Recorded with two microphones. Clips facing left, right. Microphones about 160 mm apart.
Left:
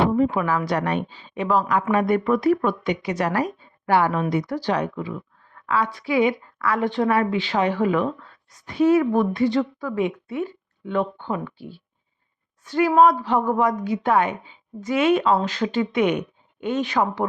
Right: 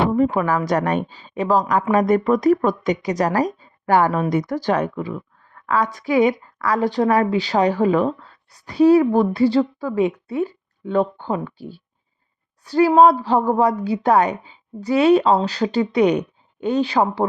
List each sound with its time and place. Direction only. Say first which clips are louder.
0.1 s a woman's voice: right 2 dB; 50° right (ahead or behind); by 17.2 s 30° right (ahead or behind)